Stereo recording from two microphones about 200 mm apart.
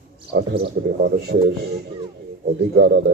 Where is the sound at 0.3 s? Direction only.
55° right (ahead or behind).